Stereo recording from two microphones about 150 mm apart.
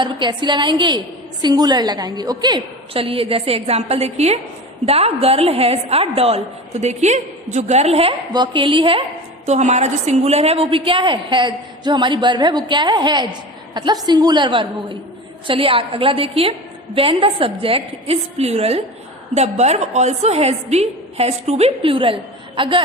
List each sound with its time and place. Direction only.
0.0 s a woman's voice: 30° right (ahead or behind)
8.3 s a woman's voice: 30° right (ahead or behind)
9.5 s a woman's voice: 50° right (ahead or behind)